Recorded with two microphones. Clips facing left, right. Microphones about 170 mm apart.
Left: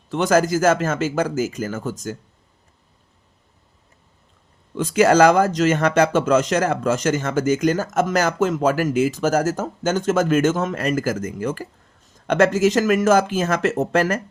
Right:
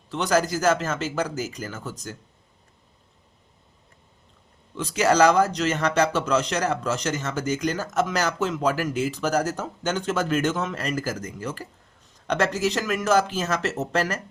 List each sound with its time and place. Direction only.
0.1 s speech: 50° left (ahead or behind)
4.8 s speech: 50° left (ahead or behind)